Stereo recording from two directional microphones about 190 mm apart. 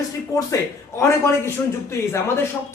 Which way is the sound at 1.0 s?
15° left (ahead or behind).